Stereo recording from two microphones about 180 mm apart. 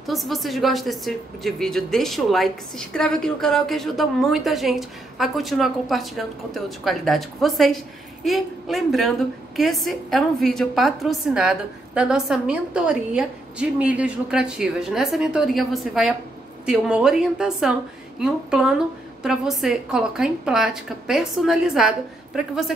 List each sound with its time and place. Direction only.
0.0 s a woman's voice: centre (ahead or behind)